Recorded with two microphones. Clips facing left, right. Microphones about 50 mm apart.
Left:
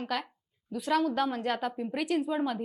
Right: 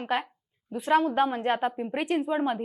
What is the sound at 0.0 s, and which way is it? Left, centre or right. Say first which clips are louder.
A woman's voice: right 5 dB; right.